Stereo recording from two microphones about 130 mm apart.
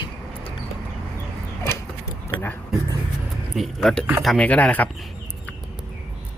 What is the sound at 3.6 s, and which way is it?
Speech, centre (ahead or behind).